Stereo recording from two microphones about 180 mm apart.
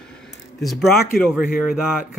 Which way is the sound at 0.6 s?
Centre (ahead or behind).